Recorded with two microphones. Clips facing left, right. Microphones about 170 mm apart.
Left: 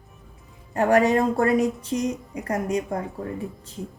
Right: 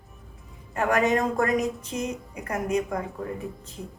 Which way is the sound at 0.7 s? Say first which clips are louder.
Left 4 dB; 30° left (ahead or behind).